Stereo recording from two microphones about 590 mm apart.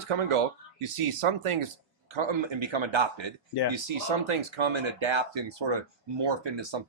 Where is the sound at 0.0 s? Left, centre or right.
Right.